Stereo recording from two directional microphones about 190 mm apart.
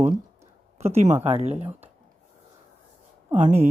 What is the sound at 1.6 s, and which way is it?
Speech, 10° right (ahead or behind).